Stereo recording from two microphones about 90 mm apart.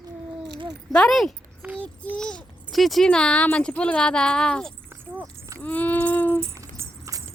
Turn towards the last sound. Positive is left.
turn(degrees=-35)  # may be behind; listen again after turning